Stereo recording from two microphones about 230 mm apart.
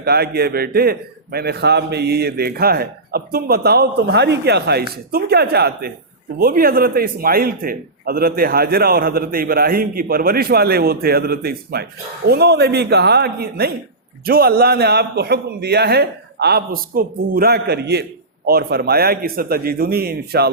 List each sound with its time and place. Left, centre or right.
0.0 s a man's voice: right